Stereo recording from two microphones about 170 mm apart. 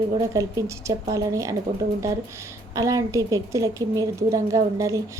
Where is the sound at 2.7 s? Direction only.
20° right (ahead or behind).